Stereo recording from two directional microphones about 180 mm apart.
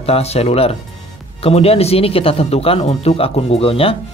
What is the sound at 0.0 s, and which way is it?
Speech, 35° left (ahead or behind).